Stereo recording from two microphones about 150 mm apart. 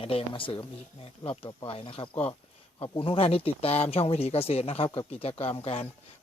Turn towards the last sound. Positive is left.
turn(degrees=40)  # may be behind; listen again after turning